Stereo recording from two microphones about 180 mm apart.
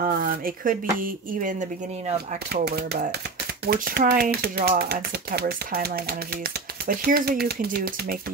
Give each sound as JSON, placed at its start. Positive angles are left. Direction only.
{"t": 0.0, "sound": "speech", "side_deg": -50}
{"t": 2.5, "sound": "speech", "side_deg": -65}